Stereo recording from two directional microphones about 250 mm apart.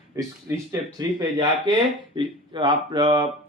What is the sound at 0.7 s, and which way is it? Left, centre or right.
Speech, centre.